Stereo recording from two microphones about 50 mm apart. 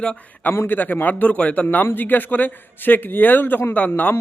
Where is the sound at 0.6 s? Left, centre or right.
Left.